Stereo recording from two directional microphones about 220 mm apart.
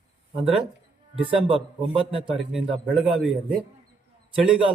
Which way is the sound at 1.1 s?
25° right (ahead or behind).